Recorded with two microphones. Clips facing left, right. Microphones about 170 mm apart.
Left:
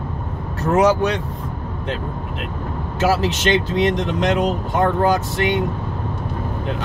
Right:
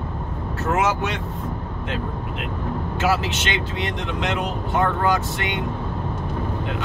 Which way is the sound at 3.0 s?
40° left (ahead or behind).